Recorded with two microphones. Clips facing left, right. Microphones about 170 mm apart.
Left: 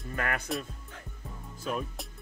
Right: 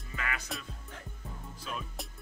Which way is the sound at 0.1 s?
50° left (ahead or behind).